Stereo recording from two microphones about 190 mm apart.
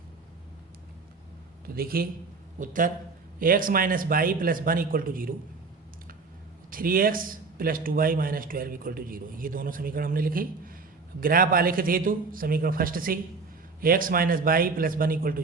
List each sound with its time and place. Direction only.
1.6 s a man's voice: 50° right (ahead or behind)
6.7 s speech: 50° right (ahead or behind)